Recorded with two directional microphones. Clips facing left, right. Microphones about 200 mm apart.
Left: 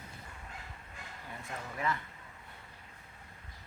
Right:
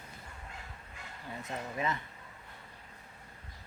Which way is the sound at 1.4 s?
20° right (ahead or behind).